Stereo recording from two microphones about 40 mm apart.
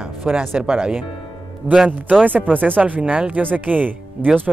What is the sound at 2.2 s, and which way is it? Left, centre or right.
Speech, right.